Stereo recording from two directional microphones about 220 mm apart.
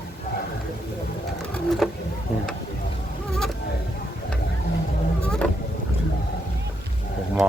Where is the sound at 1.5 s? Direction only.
Centre (ahead or behind).